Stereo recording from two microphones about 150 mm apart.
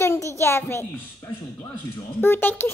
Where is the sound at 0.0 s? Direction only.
20° left (ahead or behind).